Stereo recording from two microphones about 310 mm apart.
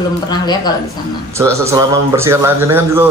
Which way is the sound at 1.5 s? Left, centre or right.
Centre.